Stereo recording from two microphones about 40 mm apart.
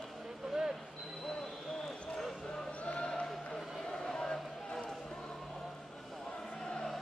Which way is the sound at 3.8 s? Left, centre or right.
Centre.